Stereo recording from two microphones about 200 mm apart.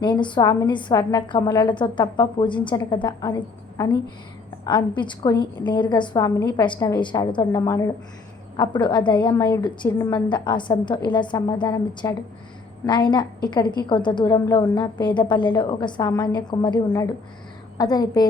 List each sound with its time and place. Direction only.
0.0 s a woman's voice: 25° left (ahead or behind)
4.6 s a woman's voice: 20° left (ahead or behind)